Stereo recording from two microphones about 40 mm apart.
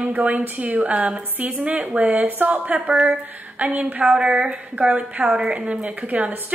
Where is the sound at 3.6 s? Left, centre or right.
Right.